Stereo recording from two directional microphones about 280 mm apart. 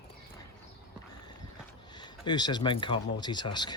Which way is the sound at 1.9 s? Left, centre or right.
Centre.